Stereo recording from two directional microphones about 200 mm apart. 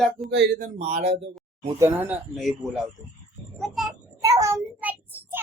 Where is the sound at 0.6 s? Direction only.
35° right (ahead or behind).